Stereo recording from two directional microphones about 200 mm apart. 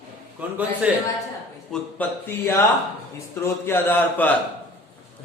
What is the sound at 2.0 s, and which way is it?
Speech, 10° left (ahead or behind).